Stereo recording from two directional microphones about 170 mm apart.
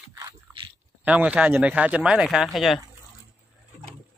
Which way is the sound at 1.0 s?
5° right (ahead or behind).